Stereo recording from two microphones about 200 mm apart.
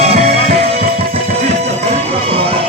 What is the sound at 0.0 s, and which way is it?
Music, 30° right (ahead or behind).